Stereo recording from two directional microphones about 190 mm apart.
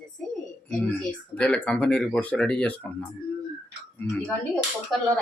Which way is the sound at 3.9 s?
5° left (ahead or behind).